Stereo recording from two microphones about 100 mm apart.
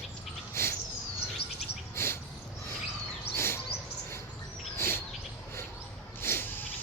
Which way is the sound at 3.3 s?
25° left (ahead or behind).